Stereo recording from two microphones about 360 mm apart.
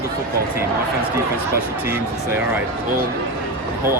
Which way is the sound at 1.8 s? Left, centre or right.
Centre.